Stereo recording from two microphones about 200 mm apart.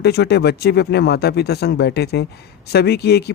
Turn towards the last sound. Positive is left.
turn(degrees=55)  # may be behind; listen again after turning